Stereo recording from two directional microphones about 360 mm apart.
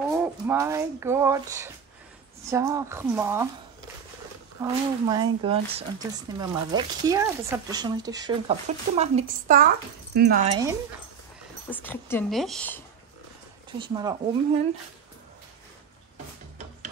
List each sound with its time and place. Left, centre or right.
0.1 s speech: centre
4.6 s speech: centre
10.5 s speech: centre
11.7 s a woman's voice: centre
13.7 s speech: centre